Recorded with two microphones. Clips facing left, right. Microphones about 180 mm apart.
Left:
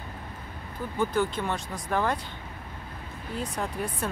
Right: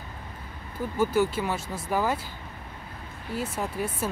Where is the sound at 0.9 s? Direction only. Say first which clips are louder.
Right 3 dB; 5° right (ahead or behind).